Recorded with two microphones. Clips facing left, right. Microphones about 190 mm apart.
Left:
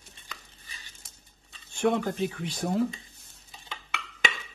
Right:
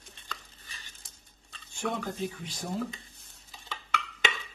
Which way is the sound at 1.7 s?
70° left (ahead or behind).